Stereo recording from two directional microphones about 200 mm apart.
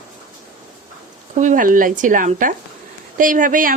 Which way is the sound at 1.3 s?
40° right (ahead or behind).